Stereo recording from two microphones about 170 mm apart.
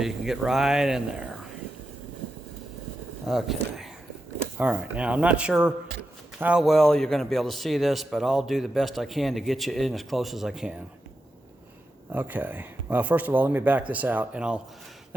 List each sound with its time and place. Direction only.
0.0 s a man's voice: 5° right (ahead or behind)
3.2 s a man's voice: centre (ahead or behind)
12.1 s speech: 10° right (ahead or behind)